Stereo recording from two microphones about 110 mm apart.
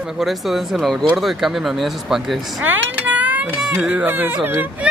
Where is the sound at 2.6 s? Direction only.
15° right (ahead or behind).